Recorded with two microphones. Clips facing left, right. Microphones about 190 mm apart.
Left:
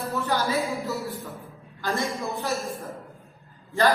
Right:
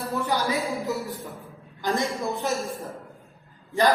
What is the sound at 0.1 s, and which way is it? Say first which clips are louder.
A woman's voice: even; 15° right (ahead or behind).